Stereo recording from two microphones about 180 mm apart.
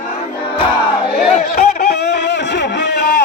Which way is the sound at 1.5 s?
65° left (ahead or behind).